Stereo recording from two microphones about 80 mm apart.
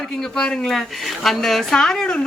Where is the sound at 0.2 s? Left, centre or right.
Centre.